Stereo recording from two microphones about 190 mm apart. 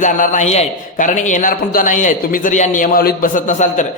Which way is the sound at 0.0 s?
40° left (ahead or behind).